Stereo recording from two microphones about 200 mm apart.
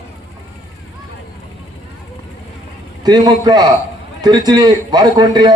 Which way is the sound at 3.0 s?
20° right (ahead or behind).